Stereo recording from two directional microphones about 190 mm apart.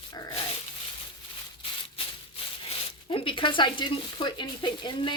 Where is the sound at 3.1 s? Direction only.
25° left (ahead or behind).